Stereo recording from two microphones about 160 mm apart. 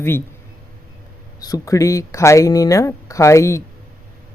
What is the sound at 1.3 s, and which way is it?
Speech, 25° left (ahead or behind).